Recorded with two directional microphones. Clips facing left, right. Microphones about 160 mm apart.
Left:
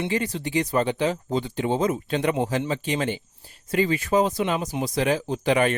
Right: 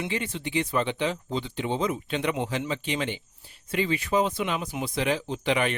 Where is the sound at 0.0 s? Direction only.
40° left (ahead or behind).